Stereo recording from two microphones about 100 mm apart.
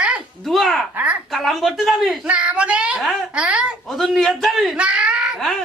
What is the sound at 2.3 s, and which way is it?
A woman's voice, 10° right (ahead or behind).